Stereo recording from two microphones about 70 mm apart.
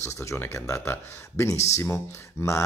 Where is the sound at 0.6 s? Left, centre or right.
Left.